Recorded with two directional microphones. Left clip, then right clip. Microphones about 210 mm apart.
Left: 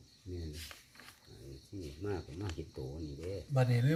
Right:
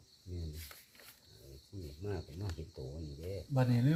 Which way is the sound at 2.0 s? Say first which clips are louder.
Left 3 dB; 35° left (ahead or behind).